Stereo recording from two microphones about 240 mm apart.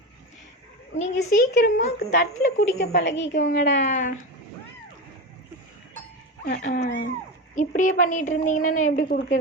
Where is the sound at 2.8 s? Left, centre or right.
Left.